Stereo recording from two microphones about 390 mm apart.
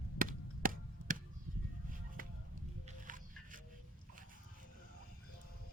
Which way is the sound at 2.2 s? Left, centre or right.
Right.